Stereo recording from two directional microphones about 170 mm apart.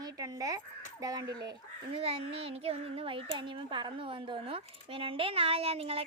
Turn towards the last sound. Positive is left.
turn(degrees=-35)  # may be behind; listen again after turning